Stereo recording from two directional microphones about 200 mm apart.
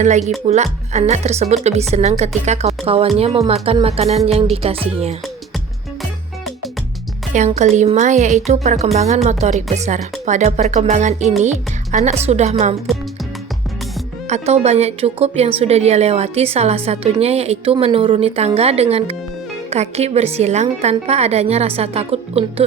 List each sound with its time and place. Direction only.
0.4 s speech: 35° right (ahead or behind)
4.3 s music: 30° right (ahead or behind)
7.3 s speech: 35° right (ahead or behind)
14.3 s speech: 35° right (ahead or behind)